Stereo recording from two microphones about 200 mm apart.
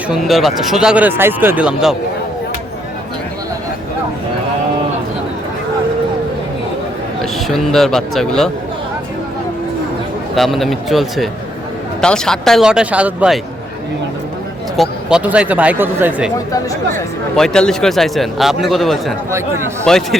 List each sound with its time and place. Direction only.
0.1 s speech: centre (ahead or behind)
7.2 s a man's voice: centre (ahead or behind)
10.3 s speech: centre (ahead or behind)
14.8 s speech: 5° right (ahead or behind)
16.5 s speech: 15° left (ahead or behind)
17.3 s speech: 5° left (ahead or behind)